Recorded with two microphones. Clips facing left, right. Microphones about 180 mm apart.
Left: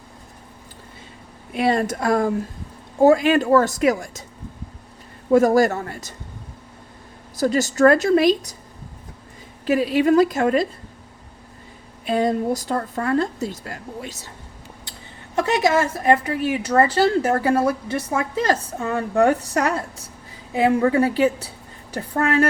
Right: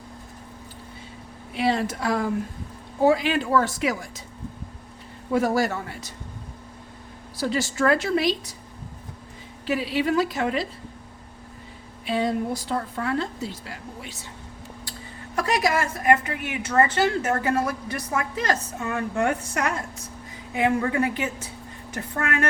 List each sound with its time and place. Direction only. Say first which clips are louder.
1.5 s a woman's voice: left 4 dB; 50° left (ahead or behind)
5.3 s a woman's voice: left 7 dB; 45° left (ahead or behind)
7.3 s a woman's voice: left 6 dB; 45° left (ahead or behind)
9.6 s a woman's voice: left 7 dB; 50° left (ahead or behind)
12.0 s a woman's voice: left 4 dB; 45° left (ahead or behind)
15.4 s a woman's voice: left 5 dB; 25° left (ahead or behind)